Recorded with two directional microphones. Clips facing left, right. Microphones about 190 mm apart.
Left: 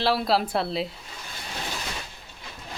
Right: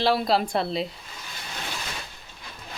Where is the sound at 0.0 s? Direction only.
Centre (ahead or behind).